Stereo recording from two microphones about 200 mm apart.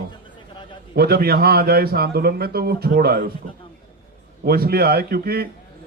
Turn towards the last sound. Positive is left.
turn(degrees=-50)  # may be behind; listen again after turning